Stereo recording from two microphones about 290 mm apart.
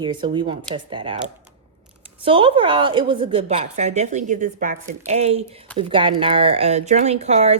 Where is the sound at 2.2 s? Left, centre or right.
Centre.